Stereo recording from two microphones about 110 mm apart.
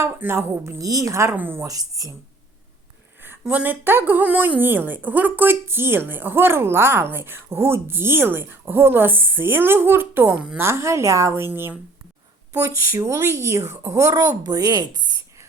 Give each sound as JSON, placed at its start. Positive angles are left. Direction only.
{"t": 0.1, "sound": "a woman's voice", "side_deg": -20}
{"t": 0.8, "sound": "a woman's voice", "side_deg": -30}
{"t": 1.6, "sound": "a woman's voice", "side_deg": -35}
{"t": 3.4, "sound": "a woman's voice", "side_deg": -15}
{"t": 10.6, "sound": "a woman's voice", "side_deg": -25}